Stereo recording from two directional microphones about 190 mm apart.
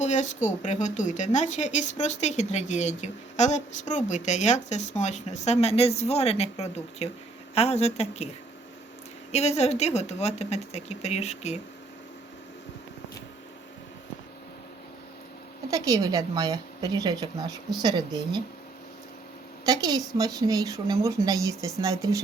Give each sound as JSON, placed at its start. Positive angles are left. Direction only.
{"t": 0.0, "sound": "speech", "side_deg": 40}
{"t": 9.3, "sound": "speech", "side_deg": 35}
{"t": 15.7, "sound": "a woman's voice", "side_deg": -20}
{"t": 19.6, "sound": "a woman's voice", "side_deg": -20}